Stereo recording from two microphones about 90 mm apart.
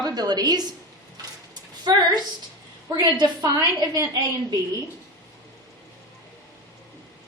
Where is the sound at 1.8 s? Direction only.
50° right (ahead or behind).